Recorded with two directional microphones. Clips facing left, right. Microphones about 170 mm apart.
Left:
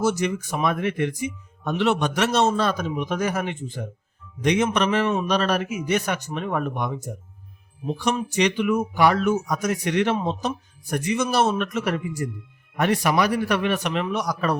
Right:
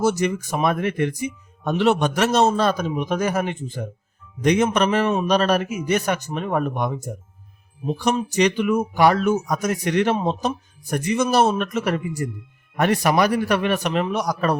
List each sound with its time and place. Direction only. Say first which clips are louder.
0.0 s speech: right 2 dB; 40° right (ahead or behind)
8.1 s a man's voice: right 3 dB; 40° right (ahead or behind)